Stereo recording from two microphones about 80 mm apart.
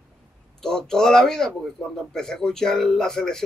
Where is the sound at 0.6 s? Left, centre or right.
Centre.